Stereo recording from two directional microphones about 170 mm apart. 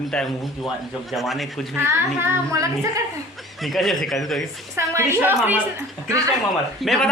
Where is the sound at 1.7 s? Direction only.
15° right (ahead or behind).